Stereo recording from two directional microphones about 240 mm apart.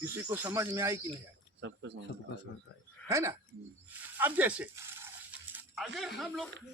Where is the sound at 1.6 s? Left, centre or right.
Right.